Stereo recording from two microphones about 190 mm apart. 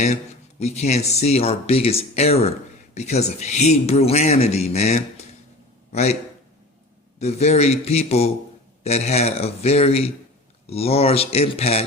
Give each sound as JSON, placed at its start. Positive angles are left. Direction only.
{"t": 0.6, "sound": "a man's voice", "side_deg": 35}
{"t": 7.2, "sound": "speech", "side_deg": 35}